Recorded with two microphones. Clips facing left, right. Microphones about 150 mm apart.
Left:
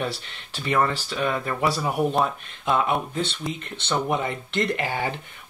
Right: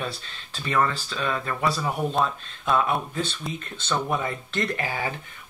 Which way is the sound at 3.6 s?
70° left (ahead or behind).